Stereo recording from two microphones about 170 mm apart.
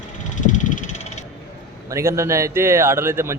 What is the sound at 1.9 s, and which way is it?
A man's voice, 15° right (ahead or behind).